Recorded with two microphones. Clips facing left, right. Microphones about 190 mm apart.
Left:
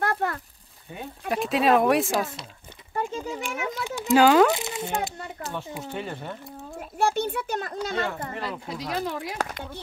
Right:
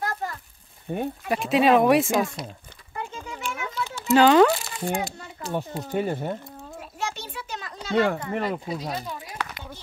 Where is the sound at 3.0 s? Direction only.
35° left (ahead or behind).